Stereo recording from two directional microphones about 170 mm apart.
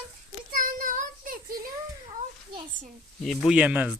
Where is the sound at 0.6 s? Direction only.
50° right (ahead or behind).